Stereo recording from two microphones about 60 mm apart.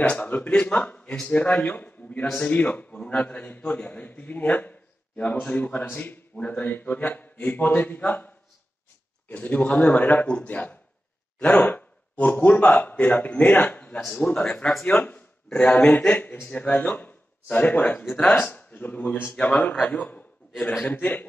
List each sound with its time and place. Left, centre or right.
0.0 s a man's voice: left
9.3 s a man's voice: left
12.9 s a man's voice: centre
13.9 s a man's voice: centre; by 21.3 s left